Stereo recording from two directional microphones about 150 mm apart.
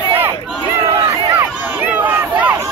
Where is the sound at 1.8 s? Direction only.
10° right (ahead or behind).